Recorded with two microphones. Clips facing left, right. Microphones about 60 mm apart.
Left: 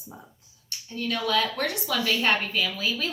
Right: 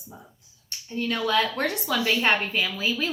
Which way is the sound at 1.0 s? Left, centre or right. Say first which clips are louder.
Right 2 dB; right.